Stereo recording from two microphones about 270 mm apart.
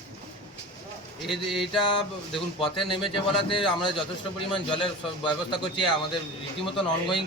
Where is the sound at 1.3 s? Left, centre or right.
Centre.